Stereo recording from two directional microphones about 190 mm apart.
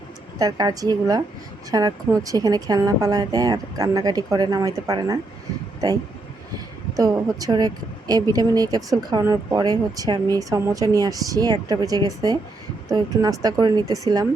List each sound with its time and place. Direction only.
0.3 s a woman's voice: 20° right (ahead or behind)
6.9 s a woman's voice: 20° right (ahead or behind)